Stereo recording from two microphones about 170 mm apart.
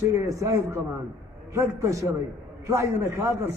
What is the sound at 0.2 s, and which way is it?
A man's voice, 15° right (ahead or behind).